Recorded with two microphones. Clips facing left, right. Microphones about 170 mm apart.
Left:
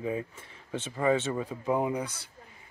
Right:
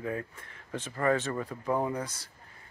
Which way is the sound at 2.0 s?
65° left (ahead or behind).